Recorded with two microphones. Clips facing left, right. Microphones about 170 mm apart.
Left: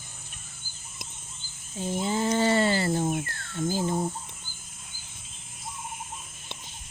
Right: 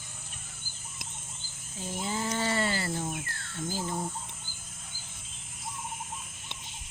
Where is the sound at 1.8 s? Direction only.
25° left (ahead or behind).